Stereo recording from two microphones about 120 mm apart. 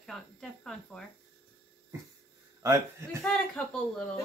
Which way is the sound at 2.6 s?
20° right (ahead or behind).